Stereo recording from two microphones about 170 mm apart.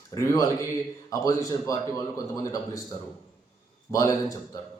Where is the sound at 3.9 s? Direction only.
20° left (ahead or behind).